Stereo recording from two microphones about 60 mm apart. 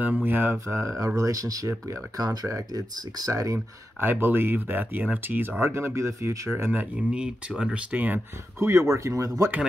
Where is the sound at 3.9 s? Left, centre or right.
Right.